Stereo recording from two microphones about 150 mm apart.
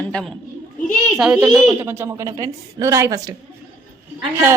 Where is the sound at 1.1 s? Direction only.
5° right (ahead or behind).